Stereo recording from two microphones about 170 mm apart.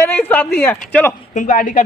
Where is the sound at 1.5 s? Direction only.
55° left (ahead or behind).